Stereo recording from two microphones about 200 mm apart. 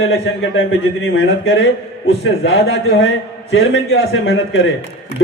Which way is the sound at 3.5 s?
75° left (ahead or behind).